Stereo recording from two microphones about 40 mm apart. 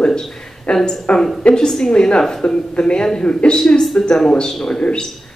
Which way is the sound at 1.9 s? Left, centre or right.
Left.